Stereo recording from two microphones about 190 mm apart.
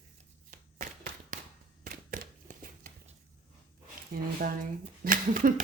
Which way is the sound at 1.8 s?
45° right (ahead or behind).